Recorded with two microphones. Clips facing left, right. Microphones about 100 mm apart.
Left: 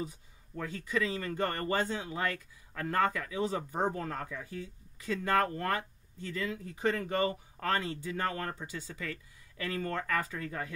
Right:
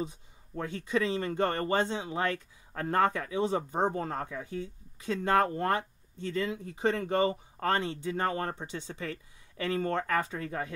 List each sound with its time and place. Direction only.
0.6 s speech: 25° right (ahead or behind)